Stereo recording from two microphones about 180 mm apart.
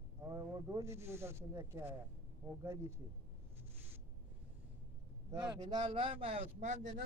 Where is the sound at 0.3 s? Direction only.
15° right (ahead or behind).